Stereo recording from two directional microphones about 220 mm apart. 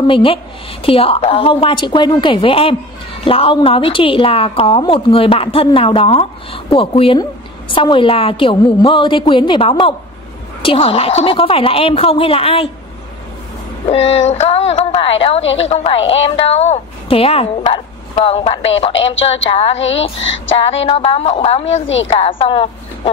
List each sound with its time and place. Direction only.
0.0 s a woman's voice: 25° left (ahead or behind)
13.8 s a woman's voice: 25° left (ahead or behind)